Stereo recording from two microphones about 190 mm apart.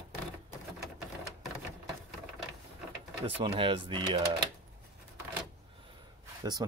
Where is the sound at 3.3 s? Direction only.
25° right (ahead or behind).